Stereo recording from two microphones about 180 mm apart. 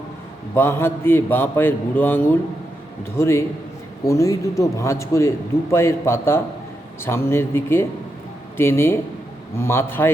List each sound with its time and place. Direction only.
0.5 s a man's voice: 15° left (ahead or behind)